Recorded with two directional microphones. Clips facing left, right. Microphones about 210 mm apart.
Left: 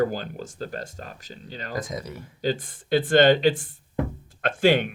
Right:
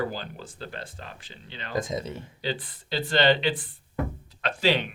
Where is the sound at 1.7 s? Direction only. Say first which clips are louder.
Right 3 dB; 25° right (ahead or behind).